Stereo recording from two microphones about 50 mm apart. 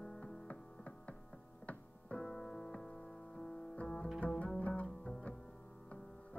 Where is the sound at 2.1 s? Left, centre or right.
Centre.